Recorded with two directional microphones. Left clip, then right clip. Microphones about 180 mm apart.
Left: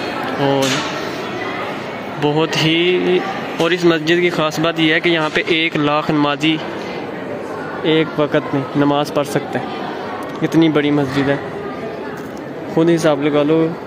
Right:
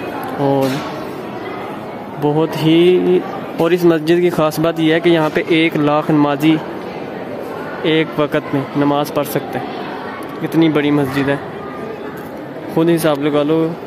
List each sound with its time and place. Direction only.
2.2 s speech: 15° right (ahead or behind); by 4.6 s 30° right (ahead or behind)
4.6 s speech: 20° right (ahead or behind)
7.8 s speech: 10° right (ahead or behind)
10.4 s speech: centre (ahead or behind)
12.7 s speech: 5° right (ahead or behind)